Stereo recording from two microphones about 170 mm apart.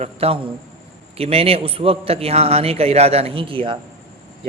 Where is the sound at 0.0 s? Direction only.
35° right (ahead or behind).